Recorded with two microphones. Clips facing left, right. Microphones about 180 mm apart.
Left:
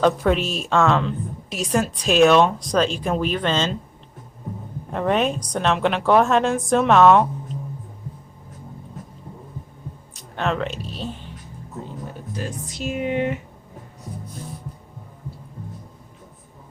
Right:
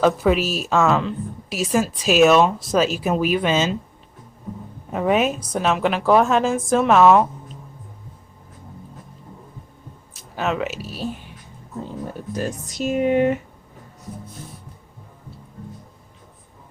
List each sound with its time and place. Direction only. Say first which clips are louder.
0.0 s speech: right 1 dB; 5° right (ahead or behind)
4.9 s speech: right 1 dB; 5° right (ahead or behind)
10.2 s speech: even; 5° right (ahead or behind)
12.3 s speech: right 4 dB; 45° right (ahead or behind)